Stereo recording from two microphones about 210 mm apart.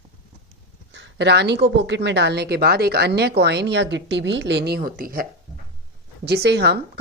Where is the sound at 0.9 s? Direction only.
60° right (ahead or behind).